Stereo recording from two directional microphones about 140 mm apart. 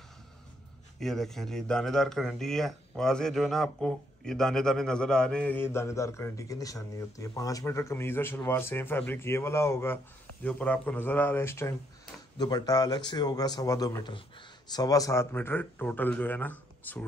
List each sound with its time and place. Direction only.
0.9 s speech: 5° left (ahead or behind)